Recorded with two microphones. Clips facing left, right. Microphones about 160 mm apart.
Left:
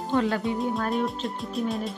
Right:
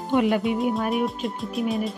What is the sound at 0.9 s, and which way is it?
Speech, centre (ahead or behind).